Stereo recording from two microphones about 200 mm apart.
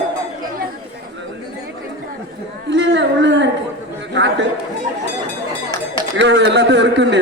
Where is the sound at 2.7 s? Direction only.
65° right (ahead or behind).